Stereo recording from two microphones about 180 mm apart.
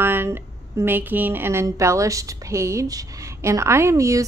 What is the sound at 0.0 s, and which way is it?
A woman's voice, 10° right (ahead or behind).